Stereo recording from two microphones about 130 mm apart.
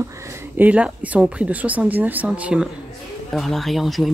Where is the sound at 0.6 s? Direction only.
10° right (ahead or behind).